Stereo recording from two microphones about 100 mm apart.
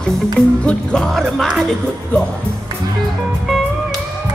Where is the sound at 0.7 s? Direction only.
5° left (ahead or behind).